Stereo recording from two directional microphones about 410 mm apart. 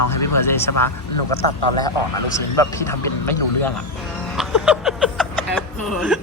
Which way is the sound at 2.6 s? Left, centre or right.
Centre.